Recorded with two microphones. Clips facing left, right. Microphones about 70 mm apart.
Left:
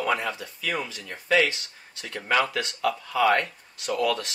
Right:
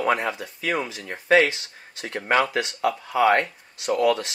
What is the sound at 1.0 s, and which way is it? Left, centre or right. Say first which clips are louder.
Speech: right 4 dB; right.